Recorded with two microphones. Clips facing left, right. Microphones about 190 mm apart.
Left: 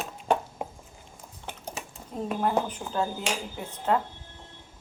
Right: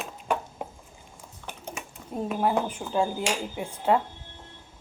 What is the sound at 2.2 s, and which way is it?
A woman's voice, 10° right (ahead or behind).